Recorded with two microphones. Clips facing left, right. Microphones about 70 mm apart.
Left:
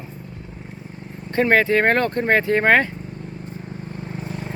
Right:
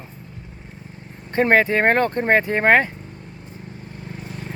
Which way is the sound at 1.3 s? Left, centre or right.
Right.